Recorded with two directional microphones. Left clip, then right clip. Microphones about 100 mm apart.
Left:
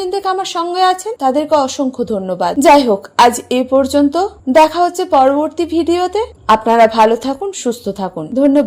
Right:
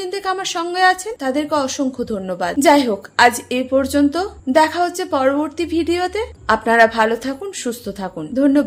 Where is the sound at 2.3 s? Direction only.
30° left (ahead or behind).